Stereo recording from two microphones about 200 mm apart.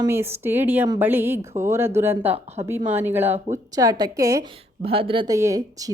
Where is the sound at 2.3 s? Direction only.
30° right (ahead or behind).